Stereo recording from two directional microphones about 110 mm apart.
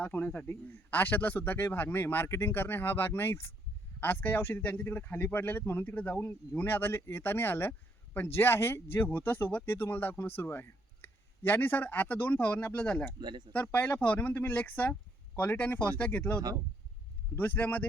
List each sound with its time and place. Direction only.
0.0 s a man's voice: 15° left (ahead or behind)
13.1 s speech: 40° right (ahead or behind)
13.5 s speech: 15° left (ahead or behind)